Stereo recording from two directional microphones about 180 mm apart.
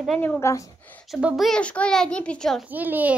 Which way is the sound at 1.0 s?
Centre (ahead or behind).